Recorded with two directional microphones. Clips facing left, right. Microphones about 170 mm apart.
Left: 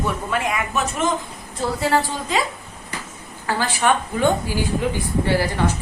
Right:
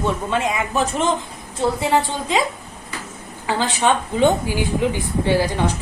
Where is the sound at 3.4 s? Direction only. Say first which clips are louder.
Right 1 dB; 20° right (ahead or behind).